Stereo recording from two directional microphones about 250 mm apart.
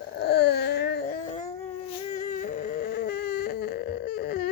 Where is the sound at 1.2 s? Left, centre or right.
Left.